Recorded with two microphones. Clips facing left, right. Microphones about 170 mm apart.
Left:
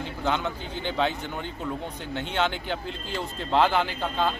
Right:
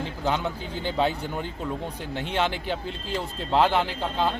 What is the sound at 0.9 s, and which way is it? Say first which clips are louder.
Speech: right 2 dB; 35° right (ahead or behind).